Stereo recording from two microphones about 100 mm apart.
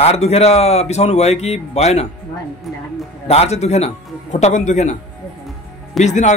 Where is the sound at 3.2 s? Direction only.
90° left.